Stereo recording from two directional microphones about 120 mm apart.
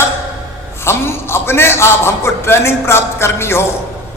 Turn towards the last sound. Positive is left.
turn(degrees=20)  # may be behind; listen again after turning